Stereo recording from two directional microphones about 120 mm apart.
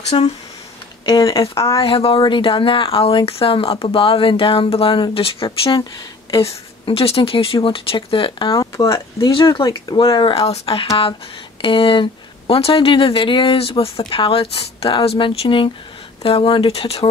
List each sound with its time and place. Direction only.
0.1 s speech: 45° left (ahead or behind)
1.0 s speech: 30° left (ahead or behind)
1.8 s speech: 50° left (ahead or behind)
6.9 s speech: 55° left (ahead or behind)
8.5 s speech: 25° left (ahead or behind)
9.2 s speech: 45° left (ahead or behind)
9.9 s speech: 45° left (ahead or behind)